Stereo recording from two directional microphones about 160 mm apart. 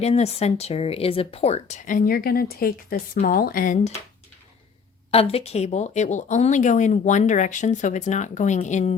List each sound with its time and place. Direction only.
0.0 s speech: 40° left (ahead or behind); by 3.9 s 60° left (ahead or behind)
5.1 s speech: 40° left (ahead or behind)